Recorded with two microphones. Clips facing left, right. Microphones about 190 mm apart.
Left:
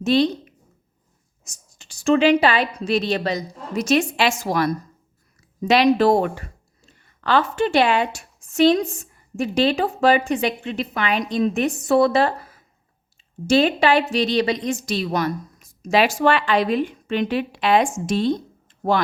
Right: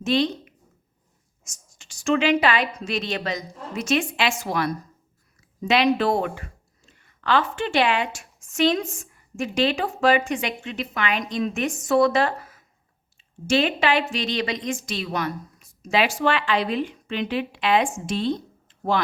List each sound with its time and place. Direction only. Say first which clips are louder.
0.0 s speech: left 4 dB; 35° left (ahead or behind)
1.8 s a woman's voice: left 5 dB; 35° left (ahead or behind)